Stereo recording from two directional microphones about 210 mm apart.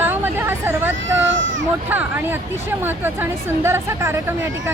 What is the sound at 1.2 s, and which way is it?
Speech, 60° right (ahead or behind).